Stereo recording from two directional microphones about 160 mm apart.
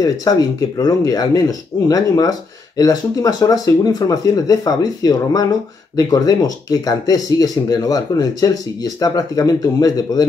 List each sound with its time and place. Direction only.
0.0 s speech: 25° left (ahead or behind)